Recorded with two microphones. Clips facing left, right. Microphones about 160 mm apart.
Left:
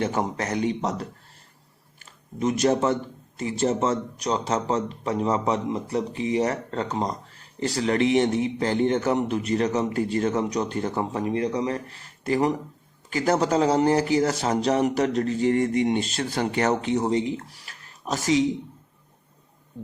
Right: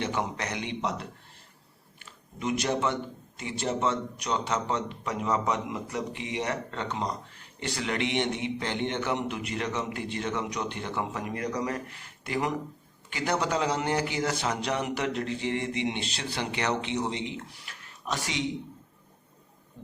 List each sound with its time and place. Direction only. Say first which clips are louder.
0.0 s a man's voice: left 5 dB; 45° left (ahead or behind)